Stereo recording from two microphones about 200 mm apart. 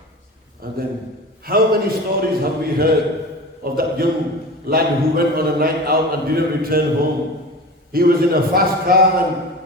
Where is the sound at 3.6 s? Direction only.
50° right (ahead or behind).